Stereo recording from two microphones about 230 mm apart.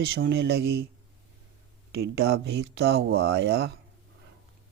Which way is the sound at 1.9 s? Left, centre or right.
Right.